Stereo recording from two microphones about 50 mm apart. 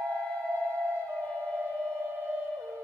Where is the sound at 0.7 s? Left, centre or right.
Right.